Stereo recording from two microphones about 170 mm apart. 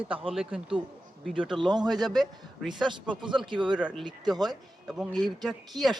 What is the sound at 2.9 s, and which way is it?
Speech, 30° right (ahead or behind).